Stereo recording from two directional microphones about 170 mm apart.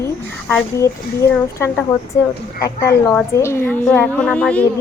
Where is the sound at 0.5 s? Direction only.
15° left (ahead or behind).